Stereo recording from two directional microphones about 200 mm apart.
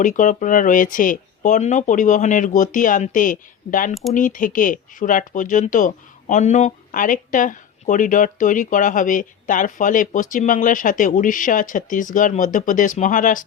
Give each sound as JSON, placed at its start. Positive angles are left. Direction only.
{"t": 0.0, "sound": "speech", "side_deg": 40}